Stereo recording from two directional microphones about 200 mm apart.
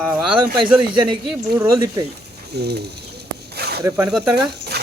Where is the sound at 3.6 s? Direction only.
55° right (ahead or behind).